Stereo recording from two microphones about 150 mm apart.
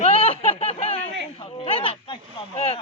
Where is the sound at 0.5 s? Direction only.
45° left (ahead or behind).